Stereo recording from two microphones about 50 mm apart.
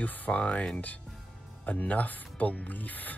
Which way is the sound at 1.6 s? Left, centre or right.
Left.